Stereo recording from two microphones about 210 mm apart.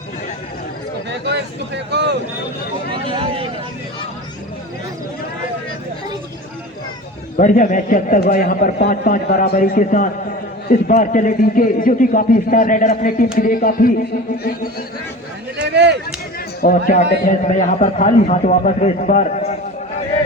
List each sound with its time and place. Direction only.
1.2 s speech: 55° right (ahead or behind)
2.9 s speech: 25° right (ahead or behind)
7.3 s a man's voice: 40° left (ahead or behind)
15.5 s speech: 55° right (ahead or behind)
16.6 s a man's voice: 45° left (ahead or behind)